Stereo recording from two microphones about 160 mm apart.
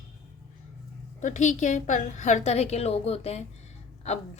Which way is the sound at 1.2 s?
50° left (ahead or behind).